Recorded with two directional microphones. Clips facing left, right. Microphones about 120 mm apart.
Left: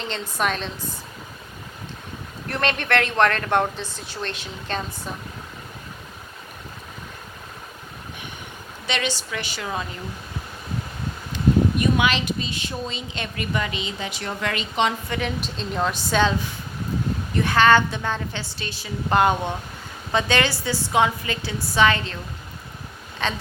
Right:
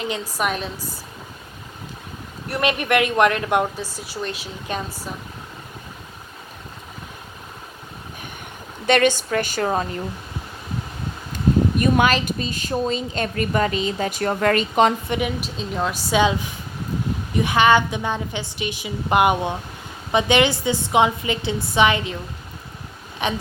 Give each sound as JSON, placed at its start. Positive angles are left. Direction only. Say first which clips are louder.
{"t": 0.0, "sound": "speech", "louder": "right 1 dB", "side_deg": -10}
{"t": 2.5, "sound": "speech", "louder": "right 3 dB", "side_deg": -10}
{"t": 8.9, "sound": "a woman's voice", "louder": "right 10 dB", "side_deg": -50}
{"t": 11.8, "sound": "a woman's voice", "louder": "right 3 dB", "side_deg": -45}
{"t": 15.4, "sound": "speech", "louder": "even", "side_deg": -5}
{"t": 17.3, "sound": "a woman's voice", "louder": "right 1 dB", "side_deg": -15}
{"t": 23.2, "sound": "speech", "louder": "right 3 dB", "side_deg": -15}